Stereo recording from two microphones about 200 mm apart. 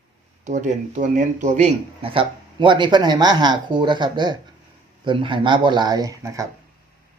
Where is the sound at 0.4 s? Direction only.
35° right (ahead or behind); by 6.5 s 15° right (ahead or behind).